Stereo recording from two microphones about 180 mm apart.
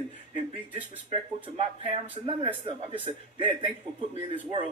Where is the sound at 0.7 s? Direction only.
30° right (ahead or behind).